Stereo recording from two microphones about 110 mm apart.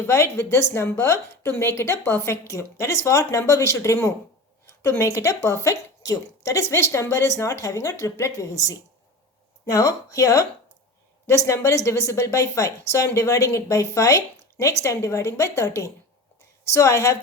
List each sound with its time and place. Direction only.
0.1 s a woman's voice: 25° left (ahead or behind)